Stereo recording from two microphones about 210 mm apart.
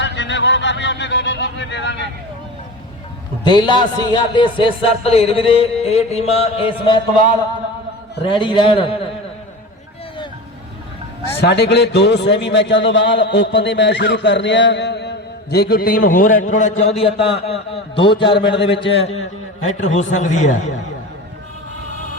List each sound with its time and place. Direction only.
0.0 s speech: 55° left (ahead or behind)
3.4 s a man's voice: 20° left (ahead or behind)
8.2 s a man's voice: 25° left (ahead or behind)
11.3 s a man's voice: 50° left (ahead or behind); by 18.2 s 25° left (ahead or behind)
18.3 s a man's voice: 50° left (ahead or behind)
18.6 s a man's voice: 25° left (ahead or behind)